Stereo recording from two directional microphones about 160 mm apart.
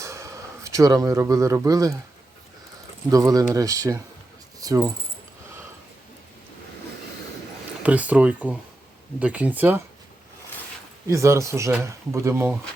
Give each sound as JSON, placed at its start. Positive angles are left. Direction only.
{"t": 0.0, "sound": "speech", "side_deg": -20}
{"t": 3.1, "sound": "speech", "side_deg": -20}
{"t": 7.8, "sound": "speech", "side_deg": -10}
{"t": 11.1, "sound": "speech", "side_deg": -20}